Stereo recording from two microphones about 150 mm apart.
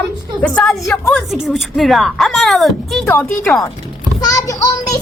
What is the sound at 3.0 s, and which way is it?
Speech, 10° left (ahead or behind).